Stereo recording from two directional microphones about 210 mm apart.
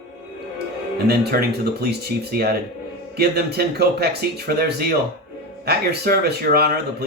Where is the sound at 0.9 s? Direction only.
50° right (ahead or behind).